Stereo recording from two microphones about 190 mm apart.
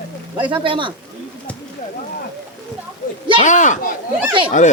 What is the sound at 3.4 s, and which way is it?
Speech, 40° left (ahead or behind).